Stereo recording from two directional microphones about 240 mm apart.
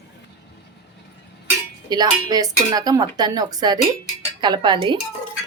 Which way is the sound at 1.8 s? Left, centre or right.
Centre.